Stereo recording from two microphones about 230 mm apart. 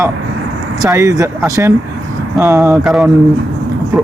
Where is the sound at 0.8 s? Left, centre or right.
Centre.